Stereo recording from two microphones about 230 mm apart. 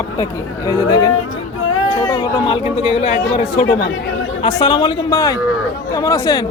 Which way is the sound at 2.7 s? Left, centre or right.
Left.